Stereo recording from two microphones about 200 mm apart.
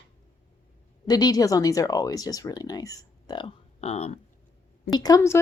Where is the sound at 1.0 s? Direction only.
20° left (ahead or behind).